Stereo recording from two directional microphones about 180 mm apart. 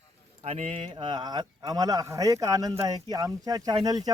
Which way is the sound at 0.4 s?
35° right (ahead or behind).